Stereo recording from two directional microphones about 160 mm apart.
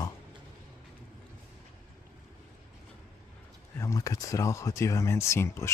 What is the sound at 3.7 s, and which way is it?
Speech, 20° left (ahead or behind).